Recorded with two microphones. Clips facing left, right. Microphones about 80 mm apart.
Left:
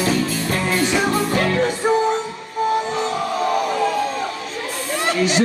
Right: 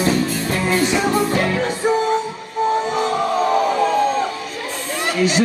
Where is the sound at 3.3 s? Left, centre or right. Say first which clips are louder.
Right 3 dB; right.